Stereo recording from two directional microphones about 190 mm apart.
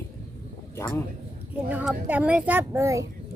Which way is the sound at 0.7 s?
15° left (ahead or behind).